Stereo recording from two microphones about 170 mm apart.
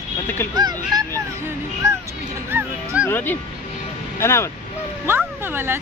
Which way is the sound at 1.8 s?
15° right (ahead or behind).